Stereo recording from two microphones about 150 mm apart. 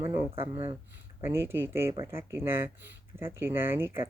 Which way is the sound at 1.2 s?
15° right (ahead or behind).